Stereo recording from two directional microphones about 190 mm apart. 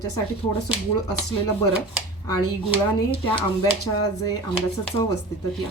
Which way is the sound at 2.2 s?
25° left (ahead or behind).